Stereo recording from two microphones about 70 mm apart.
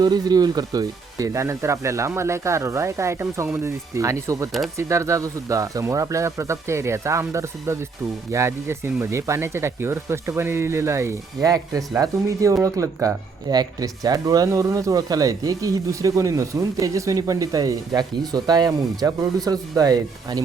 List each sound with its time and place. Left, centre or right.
0.0 s speech: right
11.4 s speech: right
13.5 s speech: right